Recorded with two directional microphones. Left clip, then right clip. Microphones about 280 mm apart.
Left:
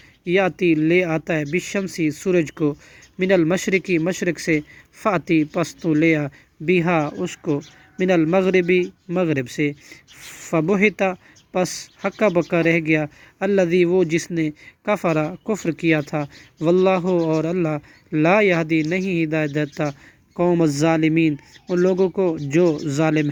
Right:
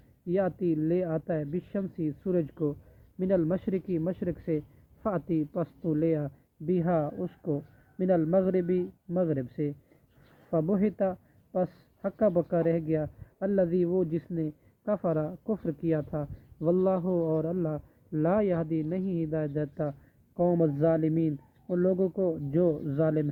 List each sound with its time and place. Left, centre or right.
0.3 s speech: left
10.5 s speech: left
23.0 s speech: left